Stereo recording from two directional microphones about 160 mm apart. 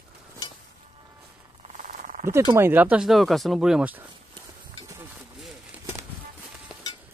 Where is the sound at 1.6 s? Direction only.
55° right (ahead or behind).